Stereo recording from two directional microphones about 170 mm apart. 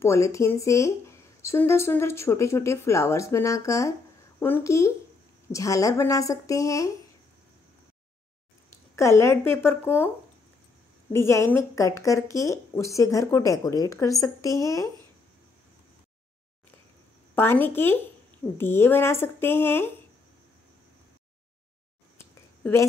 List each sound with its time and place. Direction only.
0.0 s speech: 15° left (ahead or behind)
8.9 s speech: 15° left (ahead or behind)
11.1 s speech: 15° left (ahead or behind)
17.4 s speech: 10° left (ahead or behind)
22.2 s a sound: 15° left (ahead or behind)